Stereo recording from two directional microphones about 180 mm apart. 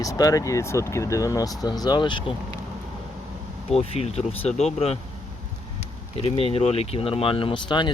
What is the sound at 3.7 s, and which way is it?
Speech, 35° left (ahead or behind).